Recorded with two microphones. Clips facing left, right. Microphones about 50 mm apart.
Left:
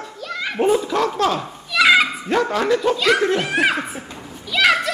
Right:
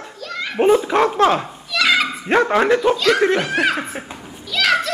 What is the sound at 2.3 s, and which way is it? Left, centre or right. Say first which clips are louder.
Speech: right 6 dB; right.